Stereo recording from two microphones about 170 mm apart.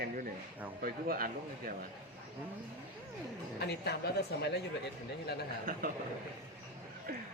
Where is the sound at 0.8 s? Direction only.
60° right (ahead or behind).